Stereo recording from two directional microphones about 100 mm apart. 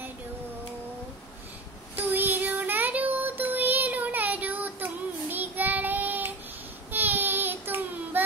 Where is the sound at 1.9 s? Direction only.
20° right (ahead or behind).